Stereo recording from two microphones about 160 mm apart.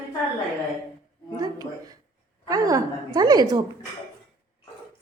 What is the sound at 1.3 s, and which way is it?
A woman's voice, 25° right (ahead or behind).